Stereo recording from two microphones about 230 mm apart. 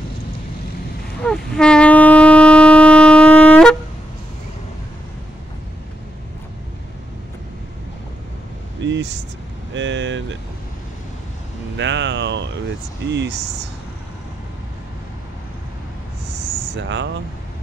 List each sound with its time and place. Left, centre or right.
1.2 s shofar: centre
8.8 s vehicle: right
11.7 s vehicle: right
13.1 s speech: right
16.7 s air conditioning: right